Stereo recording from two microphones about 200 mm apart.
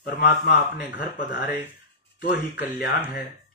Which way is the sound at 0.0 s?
50° left (ahead or behind).